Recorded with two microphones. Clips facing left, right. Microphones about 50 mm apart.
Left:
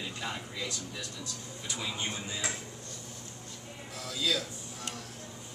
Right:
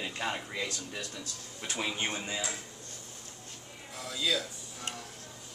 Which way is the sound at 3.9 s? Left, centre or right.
Centre.